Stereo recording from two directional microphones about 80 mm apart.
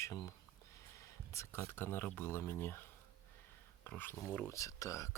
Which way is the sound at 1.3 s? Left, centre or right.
Left.